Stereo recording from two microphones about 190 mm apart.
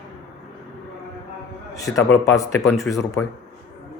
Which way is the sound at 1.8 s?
15° left (ahead or behind).